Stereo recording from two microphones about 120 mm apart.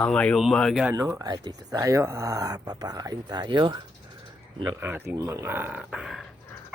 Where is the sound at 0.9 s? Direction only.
25° right (ahead or behind).